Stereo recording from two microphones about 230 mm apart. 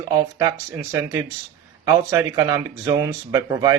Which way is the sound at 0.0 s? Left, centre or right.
Centre.